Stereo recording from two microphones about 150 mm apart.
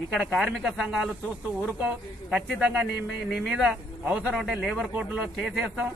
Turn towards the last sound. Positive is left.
turn(degrees=-5)  # may be behind; listen again after turning